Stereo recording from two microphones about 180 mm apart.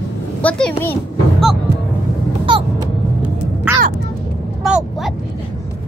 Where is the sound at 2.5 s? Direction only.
30° right (ahead or behind).